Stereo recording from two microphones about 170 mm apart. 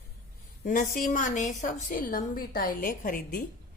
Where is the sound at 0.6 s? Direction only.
55° left (ahead or behind).